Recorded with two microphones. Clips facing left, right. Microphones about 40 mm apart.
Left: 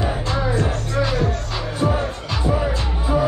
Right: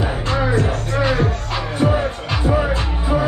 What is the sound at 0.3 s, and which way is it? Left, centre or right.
Music, right.